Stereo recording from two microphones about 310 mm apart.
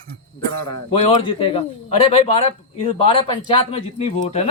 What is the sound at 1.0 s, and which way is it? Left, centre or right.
A man's voice, centre.